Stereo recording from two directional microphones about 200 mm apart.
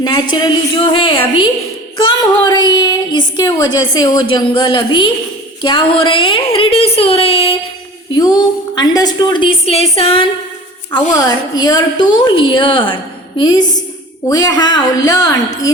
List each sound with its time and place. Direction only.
0.0 s speech: 20° left (ahead or behind)